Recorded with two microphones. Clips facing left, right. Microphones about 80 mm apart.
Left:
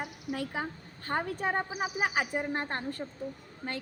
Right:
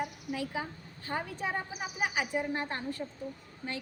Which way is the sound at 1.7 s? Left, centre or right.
Left.